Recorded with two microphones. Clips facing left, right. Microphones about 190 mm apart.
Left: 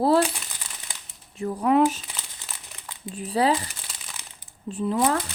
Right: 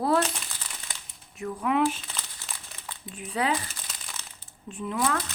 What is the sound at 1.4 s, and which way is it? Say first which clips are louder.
Speech: left 5 dB; 35° left (ahead or behind).